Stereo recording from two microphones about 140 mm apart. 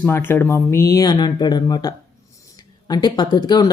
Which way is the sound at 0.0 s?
15° left (ahead or behind).